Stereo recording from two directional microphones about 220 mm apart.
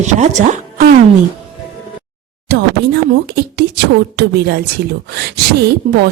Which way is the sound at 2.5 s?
50° right (ahead or behind).